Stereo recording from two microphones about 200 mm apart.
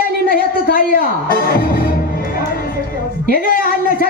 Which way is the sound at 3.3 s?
45° left (ahead or behind).